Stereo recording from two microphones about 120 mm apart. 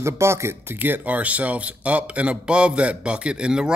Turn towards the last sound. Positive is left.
turn(degrees=-5)  # may be behind; listen again after turning